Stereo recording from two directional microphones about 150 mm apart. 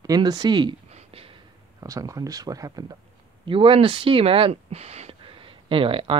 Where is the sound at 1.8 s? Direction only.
20° right (ahead or behind).